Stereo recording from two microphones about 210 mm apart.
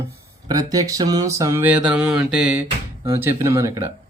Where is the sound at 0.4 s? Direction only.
15° right (ahead or behind).